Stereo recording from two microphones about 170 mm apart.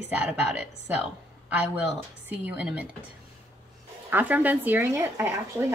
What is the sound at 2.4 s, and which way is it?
Speech, 5° right (ahead or behind).